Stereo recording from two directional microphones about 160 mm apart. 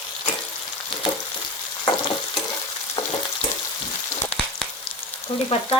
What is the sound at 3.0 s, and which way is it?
Stir, 30° left (ahead or behind).